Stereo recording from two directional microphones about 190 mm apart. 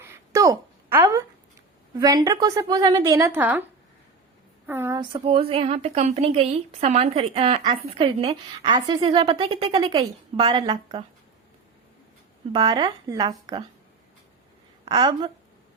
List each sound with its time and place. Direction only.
0.0 s a sound: 15° right (ahead or behind)
2.0 s speech: 20° right (ahead or behind)
4.6 s a woman's voice: 10° right (ahead or behind)
4.9 s speech: 25° right (ahead or behind)
12.5 s speech: 25° right (ahead or behind)
14.8 s a woman's voice: 25° right (ahead or behind)